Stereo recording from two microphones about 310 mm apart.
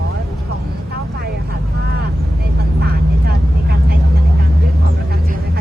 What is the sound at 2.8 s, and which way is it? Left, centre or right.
Vehicle, right.